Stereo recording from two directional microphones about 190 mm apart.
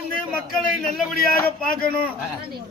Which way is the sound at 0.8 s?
Centre (ahead or behind).